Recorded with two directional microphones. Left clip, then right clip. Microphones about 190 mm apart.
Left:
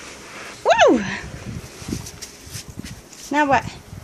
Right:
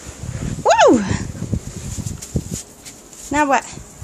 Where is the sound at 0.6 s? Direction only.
15° right (ahead or behind).